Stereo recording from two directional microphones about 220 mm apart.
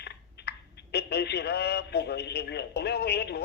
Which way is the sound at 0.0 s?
50° left (ahead or behind).